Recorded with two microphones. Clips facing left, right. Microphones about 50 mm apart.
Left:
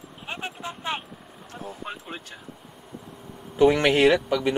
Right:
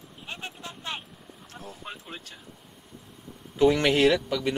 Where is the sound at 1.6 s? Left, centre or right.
Centre.